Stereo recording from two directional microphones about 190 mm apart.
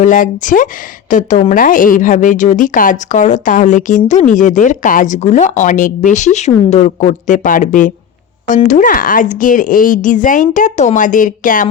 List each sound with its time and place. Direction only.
0.0 s a woman's voice: 45° left (ahead or behind)